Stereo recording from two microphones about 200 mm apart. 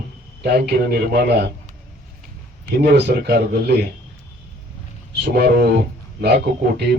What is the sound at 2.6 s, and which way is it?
Speech, 50° right (ahead or behind).